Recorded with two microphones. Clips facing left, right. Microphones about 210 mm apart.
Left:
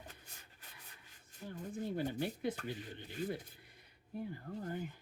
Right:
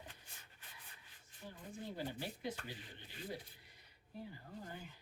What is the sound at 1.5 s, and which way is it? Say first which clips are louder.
Speech: left 7 dB; 55° left (ahead or behind).